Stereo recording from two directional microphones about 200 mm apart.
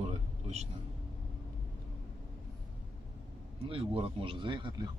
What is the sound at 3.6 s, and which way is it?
Speech, 30° right (ahead or behind).